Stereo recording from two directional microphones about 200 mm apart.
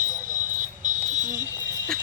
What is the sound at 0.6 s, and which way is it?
Vehicle, 40° right (ahead or behind).